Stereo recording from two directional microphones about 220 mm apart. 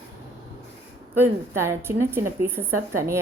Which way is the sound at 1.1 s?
10° right (ahead or behind).